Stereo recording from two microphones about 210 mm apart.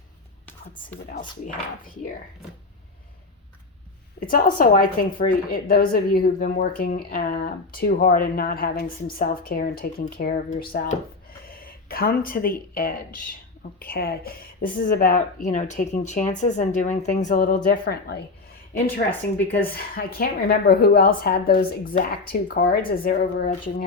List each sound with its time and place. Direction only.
4.3 s a woman's voice: 40° left (ahead or behind)
19.7 s a woman's voice: 45° left (ahead or behind)